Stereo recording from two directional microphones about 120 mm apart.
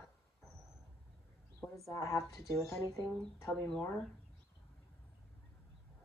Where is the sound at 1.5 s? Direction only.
25° left (ahead or behind).